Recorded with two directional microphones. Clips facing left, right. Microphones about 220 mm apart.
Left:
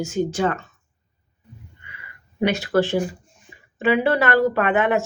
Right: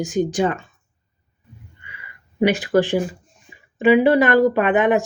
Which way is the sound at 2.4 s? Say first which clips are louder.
Right 3 dB; 15° right (ahead or behind).